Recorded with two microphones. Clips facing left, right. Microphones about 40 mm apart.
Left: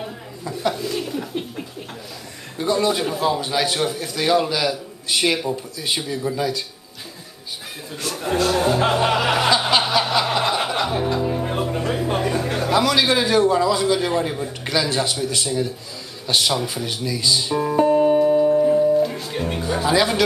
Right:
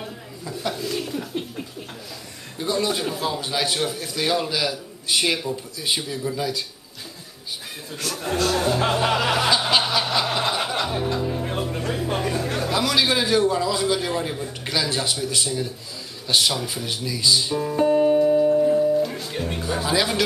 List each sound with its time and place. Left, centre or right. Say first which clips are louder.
0.0 s speech: left 3 dB; centre
2.5 s a man's voice: left 4 dB; centre
8.2 s speech: left 3 dB; centre
13.4 s a man's voice: left 4 dB; left
13.7 s a man's voice: left 4 dB; centre
17.7 s music: left 2 dB; centre
18.1 s music: left 2 dB; centre
19.3 s speech: left 3 dB; centre